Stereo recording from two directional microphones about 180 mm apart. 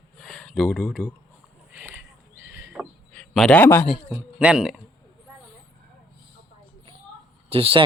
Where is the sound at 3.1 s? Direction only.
5° left (ahead or behind).